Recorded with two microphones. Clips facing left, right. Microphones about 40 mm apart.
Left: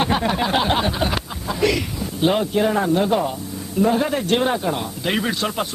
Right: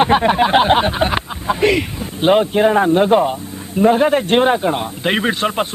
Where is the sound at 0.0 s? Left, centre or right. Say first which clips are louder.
Right 7 dB; right.